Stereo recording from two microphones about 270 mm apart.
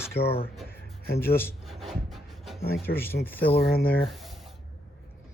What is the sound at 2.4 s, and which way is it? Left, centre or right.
Speech, centre.